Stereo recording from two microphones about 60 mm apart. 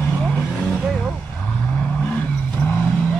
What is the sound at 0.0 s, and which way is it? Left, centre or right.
Vehicle, left.